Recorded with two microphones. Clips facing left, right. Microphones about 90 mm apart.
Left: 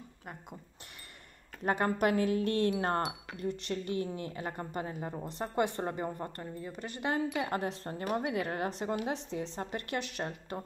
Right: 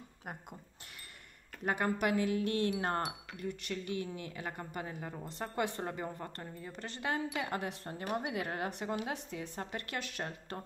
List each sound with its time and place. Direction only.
1.6 s a woman's voice: 35° left (ahead or behind)
6.4 s speech: 5° left (ahead or behind)
7.0 s a woman's voice: 30° left (ahead or behind)